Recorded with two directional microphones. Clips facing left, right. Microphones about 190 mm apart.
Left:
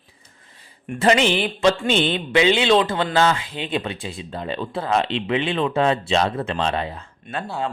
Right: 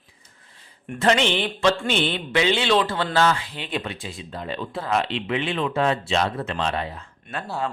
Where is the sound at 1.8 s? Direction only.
20° left (ahead or behind).